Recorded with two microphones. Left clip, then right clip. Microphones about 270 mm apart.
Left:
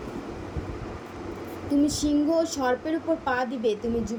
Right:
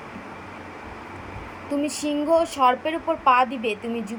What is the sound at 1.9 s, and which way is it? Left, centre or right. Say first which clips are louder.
Speech: right 3 dB; right.